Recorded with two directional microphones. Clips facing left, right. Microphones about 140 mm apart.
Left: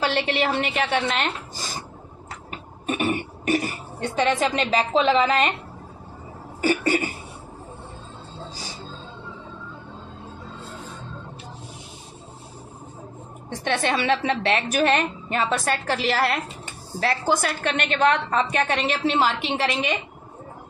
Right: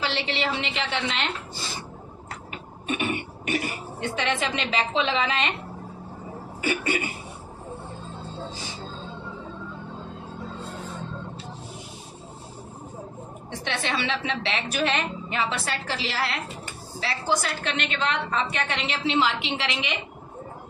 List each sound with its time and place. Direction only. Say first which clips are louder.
0.0 s a woman's voice: left 5 dB; 50° left (ahead or behind)
2.9 s speech: left 3 dB; 40° left (ahead or behind)
6.6 s speech: left 5 dB; 40° left (ahead or behind)
13.7 s a woman's voice: left 6 dB; 50° left (ahead or behind)